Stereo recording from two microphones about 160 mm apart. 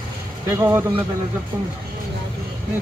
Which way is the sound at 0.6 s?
15° right (ahead or behind).